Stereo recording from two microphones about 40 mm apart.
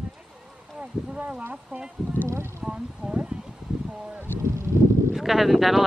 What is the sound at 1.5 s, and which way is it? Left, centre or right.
Speech, right.